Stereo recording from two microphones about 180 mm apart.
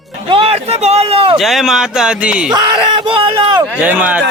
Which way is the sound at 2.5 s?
25° right (ahead or behind).